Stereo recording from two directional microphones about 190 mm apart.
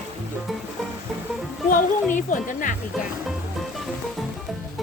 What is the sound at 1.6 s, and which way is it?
Speech, 45° left (ahead or behind).